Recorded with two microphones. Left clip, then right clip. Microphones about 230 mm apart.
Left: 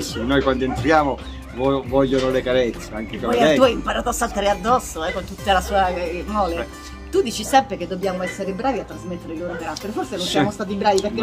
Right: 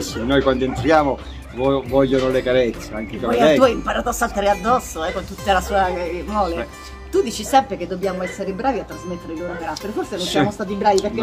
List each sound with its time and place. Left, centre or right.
0.0 s speech: centre
3.6 s speech: centre
7.1 s speech: centre
10.1 s speech: centre